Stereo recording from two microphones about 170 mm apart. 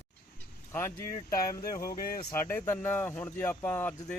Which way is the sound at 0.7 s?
15° left (ahead or behind).